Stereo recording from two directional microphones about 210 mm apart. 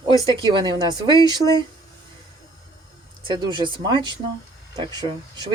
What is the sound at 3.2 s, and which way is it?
Speech, 20° right (ahead or behind).